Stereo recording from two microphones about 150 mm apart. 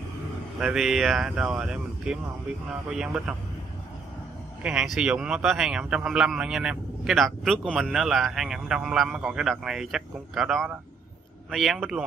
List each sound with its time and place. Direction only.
0.6 s speech: 5° right (ahead or behind)
4.6 s speech: 5° right (ahead or behind)